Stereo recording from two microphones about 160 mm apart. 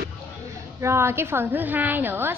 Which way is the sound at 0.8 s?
15° right (ahead or behind).